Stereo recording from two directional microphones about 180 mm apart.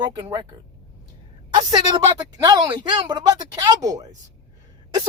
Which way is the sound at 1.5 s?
25° right (ahead or behind).